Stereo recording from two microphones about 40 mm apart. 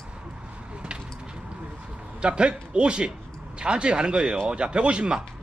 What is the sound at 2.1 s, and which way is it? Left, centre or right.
A man's voice, right.